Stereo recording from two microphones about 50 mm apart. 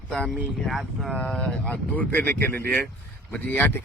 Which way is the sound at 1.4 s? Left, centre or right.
Left.